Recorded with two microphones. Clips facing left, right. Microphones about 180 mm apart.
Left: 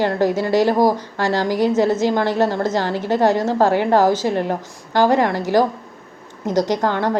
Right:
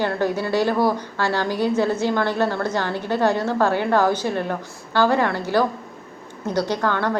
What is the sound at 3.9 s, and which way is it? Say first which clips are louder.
Speech: left 4 dB; 45° left (ahead or behind).